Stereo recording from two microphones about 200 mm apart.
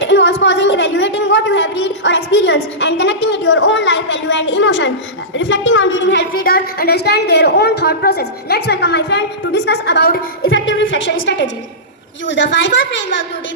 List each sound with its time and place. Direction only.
0.0 s a sound: 60° left (ahead or behind)
5.3 s a woman's voice: 65° left (ahead or behind)
6.3 s a woman's voice: 45° left (ahead or behind)
10.5 s a woman's voice: 70° left (ahead or behind)